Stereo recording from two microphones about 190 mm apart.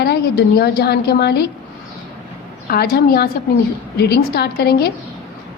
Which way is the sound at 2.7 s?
55° left (ahead or behind).